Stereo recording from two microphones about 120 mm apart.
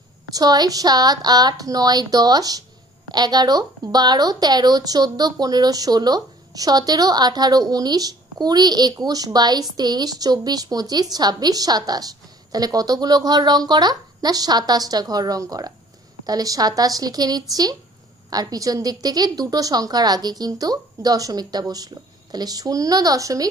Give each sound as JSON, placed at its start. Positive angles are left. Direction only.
{"t": 0.3, "sound": "speech", "side_deg": -35}